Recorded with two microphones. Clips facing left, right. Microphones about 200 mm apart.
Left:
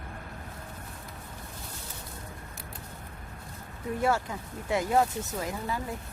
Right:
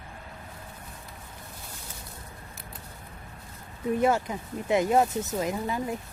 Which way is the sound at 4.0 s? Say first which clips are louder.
Right 2 dB; 20° right (ahead or behind).